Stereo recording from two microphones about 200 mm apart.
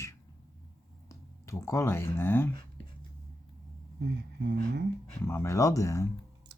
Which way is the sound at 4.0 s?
55° right (ahead or behind).